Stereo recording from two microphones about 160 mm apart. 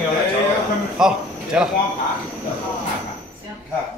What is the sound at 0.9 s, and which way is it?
Speech, 5° right (ahead or behind).